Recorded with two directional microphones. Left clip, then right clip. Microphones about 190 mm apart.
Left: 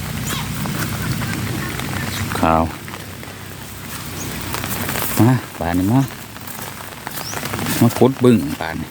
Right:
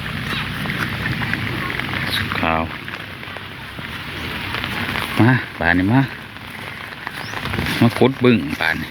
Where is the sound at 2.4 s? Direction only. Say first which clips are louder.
Left 6 dB; 40° left (ahead or behind).